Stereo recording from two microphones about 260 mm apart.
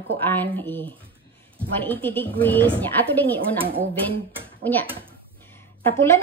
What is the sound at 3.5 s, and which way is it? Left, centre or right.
Speech, right.